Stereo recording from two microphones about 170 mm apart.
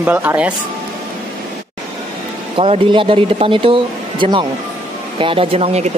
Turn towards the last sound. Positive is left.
turn(degrees=-40)  # may be behind; listen again after turning